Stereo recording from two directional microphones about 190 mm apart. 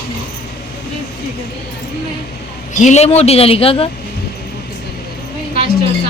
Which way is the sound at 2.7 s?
40° left (ahead or behind).